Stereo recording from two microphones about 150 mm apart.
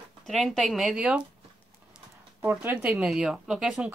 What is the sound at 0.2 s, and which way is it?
Speech, centre (ahead or behind).